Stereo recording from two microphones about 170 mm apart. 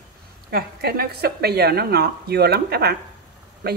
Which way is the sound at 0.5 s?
65° right (ahead or behind).